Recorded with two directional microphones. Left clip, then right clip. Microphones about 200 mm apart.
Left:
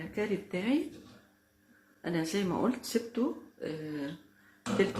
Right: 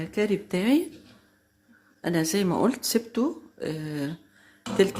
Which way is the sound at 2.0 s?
50° right (ahead or behind).